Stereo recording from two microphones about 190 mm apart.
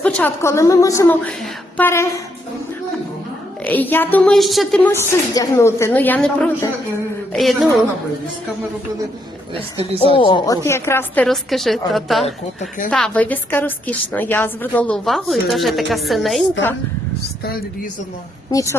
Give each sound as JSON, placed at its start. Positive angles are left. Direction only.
{"t": 0.0, "sound": "a woman's voice", "side_deg": 10}
{"t": 3.7, "sound": "a woman's voice", "side_deg": 10}
{"t": 4.9, "sound": "a woman's voice", "side_deg": 15}
{"t": 9.6, "sound": "a woman's voice", "side_deg": -30}
{"t": 10.0, "sound": "a woman's voice", "side_deg": 30}
{"t": 18.5, "sound": "a woman's voice", "side_deg": 15}